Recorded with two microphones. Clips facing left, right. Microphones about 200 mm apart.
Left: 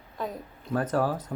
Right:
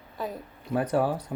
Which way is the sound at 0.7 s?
10° right (ahead or behind).